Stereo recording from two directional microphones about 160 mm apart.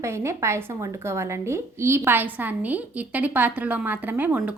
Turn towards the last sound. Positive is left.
turn(degrees=-10)  # may be behind; listen again after turning